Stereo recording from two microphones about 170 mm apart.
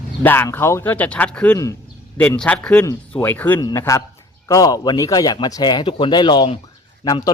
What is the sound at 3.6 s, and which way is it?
Speech, 20° left (ahead or behind).